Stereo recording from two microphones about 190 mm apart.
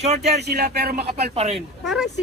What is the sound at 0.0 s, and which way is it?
Speech, 35° right (ahead or behind).